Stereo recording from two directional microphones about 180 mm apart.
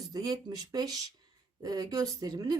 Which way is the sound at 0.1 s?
20° right (ahead or behind).